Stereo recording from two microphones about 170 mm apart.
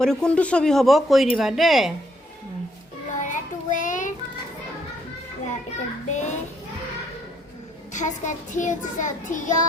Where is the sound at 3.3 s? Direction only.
50° left (ahead or behind).